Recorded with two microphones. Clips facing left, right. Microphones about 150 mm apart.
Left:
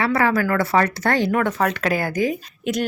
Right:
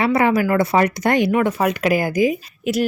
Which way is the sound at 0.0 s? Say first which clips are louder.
Right 3 dB; 20° right (ahead or behind).